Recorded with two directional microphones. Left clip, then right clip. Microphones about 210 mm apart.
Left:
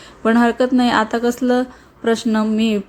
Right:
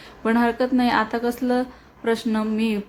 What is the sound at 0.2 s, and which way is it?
A woman's voice, 20° left (ahead or behind).